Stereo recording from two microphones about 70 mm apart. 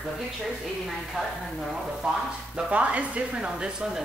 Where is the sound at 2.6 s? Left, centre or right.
Centre.